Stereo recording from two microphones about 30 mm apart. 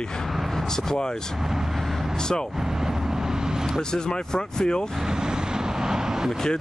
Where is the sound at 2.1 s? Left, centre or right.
Left.